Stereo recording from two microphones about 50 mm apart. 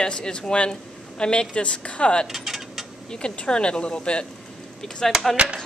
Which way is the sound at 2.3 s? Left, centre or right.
Centre.